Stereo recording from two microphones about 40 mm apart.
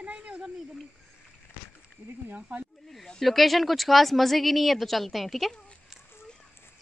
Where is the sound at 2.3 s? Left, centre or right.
Right.